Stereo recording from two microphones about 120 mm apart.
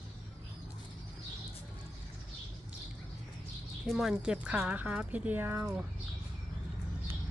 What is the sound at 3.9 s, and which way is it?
A woman's voice, centre (ahead or behind).